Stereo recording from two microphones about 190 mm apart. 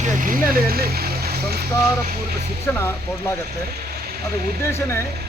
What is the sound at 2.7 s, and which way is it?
Speech, 10° left (ahead or behind).